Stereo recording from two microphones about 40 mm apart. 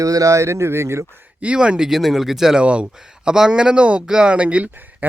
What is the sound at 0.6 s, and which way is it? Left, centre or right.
Speech, right.